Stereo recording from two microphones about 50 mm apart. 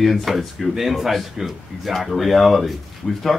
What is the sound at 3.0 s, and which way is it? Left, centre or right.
Speech, centre.